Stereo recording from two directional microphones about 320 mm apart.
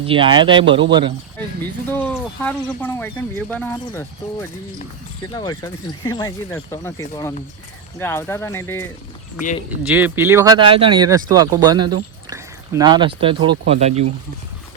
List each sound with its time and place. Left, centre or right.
0.0 s speech: centre
1.9 s speech: centre
9.4 s speech: left
9.8 s speech: centre